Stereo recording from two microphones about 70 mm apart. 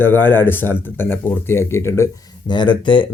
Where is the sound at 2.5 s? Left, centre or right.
Left.